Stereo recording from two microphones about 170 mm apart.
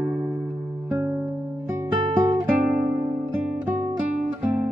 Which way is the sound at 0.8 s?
15° right (ahead or behind).